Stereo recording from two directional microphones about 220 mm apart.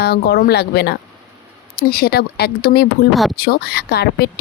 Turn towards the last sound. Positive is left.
turn(degrees=45)  # may be behind; listen again after turning